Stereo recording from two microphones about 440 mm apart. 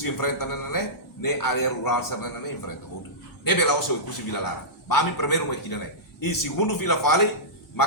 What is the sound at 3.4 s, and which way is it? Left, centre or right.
A man's voice, left.